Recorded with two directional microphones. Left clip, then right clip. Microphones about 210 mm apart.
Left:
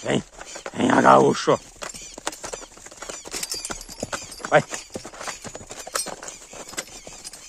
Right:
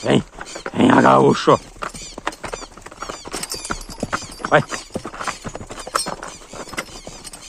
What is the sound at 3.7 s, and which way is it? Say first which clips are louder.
Clip-clop: right 6 dB; 35° left (ahead or behind).